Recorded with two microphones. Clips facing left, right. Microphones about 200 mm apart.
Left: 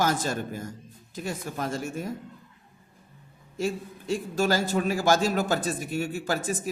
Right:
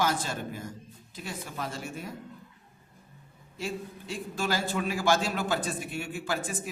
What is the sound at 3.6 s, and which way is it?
Speech, 45° left (ahead or behind).